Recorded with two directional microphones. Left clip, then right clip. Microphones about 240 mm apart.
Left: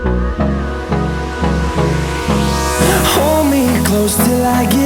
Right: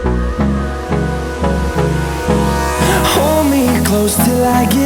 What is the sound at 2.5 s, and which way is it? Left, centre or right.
Music, centre.